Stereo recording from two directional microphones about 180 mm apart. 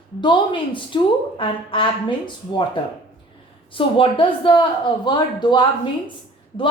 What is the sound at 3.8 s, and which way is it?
A woman's voice, 30° left (ahead or behind).